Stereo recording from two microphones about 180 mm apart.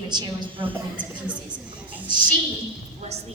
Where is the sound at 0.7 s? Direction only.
5° right (ahead or behind).